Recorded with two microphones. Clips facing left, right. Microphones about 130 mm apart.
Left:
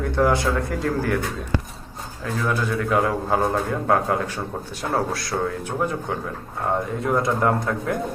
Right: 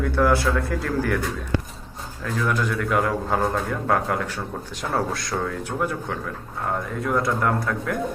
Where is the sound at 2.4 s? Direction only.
15° left (ahead or behind).